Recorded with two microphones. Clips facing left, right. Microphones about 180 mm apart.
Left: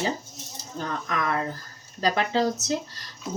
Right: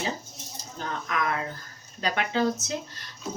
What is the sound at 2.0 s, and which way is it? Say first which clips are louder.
Speech: left 2 dB; 35° left (ahead or behind).